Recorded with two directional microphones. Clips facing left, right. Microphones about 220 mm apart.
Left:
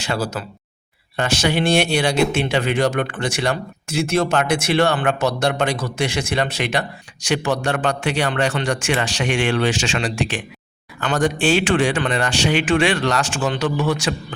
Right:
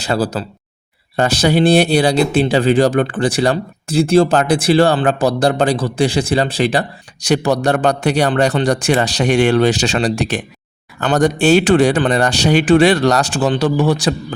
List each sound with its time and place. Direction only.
0.0 s speech: 35° right (ahead or behind)